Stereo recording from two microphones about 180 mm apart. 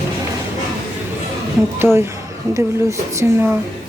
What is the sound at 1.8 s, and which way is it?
Speech, 15° right (ahead or behind).